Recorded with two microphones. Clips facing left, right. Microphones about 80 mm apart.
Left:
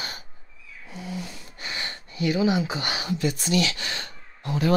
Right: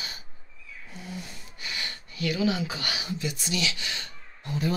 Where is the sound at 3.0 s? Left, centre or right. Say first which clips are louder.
Left 6 dB; left.